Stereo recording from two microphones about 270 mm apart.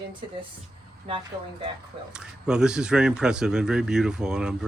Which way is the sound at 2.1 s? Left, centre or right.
Centre.